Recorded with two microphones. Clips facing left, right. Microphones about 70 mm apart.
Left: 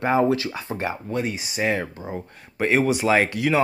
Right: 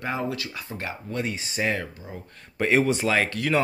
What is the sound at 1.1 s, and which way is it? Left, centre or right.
Speech, centre.